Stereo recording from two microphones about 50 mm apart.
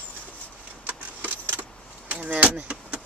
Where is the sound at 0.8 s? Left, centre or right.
Right.